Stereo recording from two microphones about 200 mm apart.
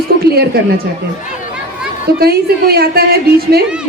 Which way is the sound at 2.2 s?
50° right (ahead or behind).